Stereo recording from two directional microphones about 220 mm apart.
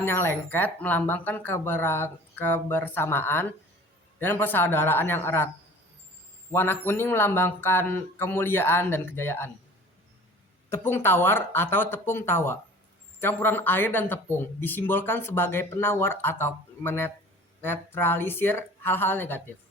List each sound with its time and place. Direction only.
0.0 s speech: 10° left (ahead or behind)
6.5 s speech: 10° left (ahead or behind)
10.7 s speech: 10° left (ahead or behind)